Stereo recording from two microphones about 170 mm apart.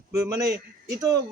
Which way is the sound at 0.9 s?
20° right (ahead or behind).